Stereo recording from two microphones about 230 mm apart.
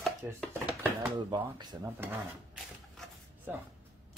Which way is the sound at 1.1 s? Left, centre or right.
Centre.